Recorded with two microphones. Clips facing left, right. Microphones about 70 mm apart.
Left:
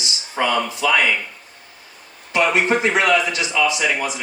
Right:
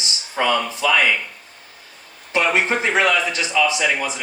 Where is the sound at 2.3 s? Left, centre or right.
Right.